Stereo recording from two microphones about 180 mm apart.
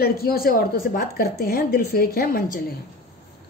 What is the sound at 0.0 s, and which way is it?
Speech, 55° left (ahead or behind).